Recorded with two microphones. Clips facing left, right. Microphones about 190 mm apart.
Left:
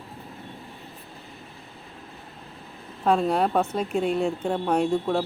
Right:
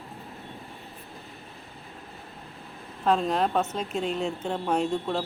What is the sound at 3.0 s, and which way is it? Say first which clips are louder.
Speech: left 2 dB; 10° left (ahead or behind).